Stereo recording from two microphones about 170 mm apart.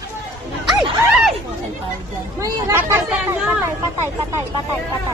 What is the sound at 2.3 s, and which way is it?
Speech, 20° right (ahead or behind).